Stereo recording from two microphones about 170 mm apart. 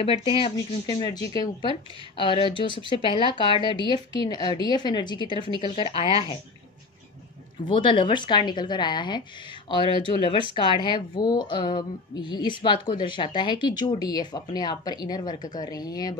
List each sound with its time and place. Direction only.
0.0 s a woman's voice: 30° left (ahead or behind)
7.6 s a woman's voice: 30° left (ahead or behind)